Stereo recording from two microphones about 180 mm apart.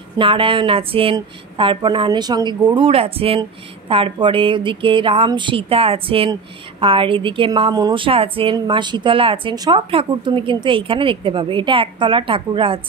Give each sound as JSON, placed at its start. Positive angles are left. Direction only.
{"t": 0.2, "sound": "speech", "side_deg": -30}